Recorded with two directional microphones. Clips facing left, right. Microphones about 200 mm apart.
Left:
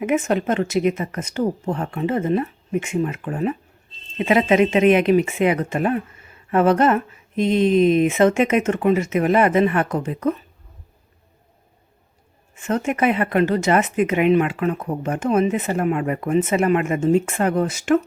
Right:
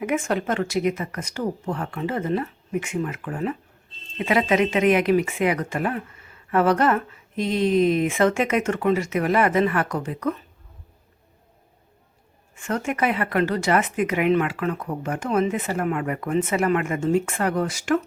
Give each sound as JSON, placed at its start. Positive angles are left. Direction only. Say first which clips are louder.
{"t": 0.0, "sound": "speech", "louder": "left 4 dB", "side_deg": 20}
{"t": 12.5, "sound": "speech", "louder": "left 4 dB", "side_deg": 20}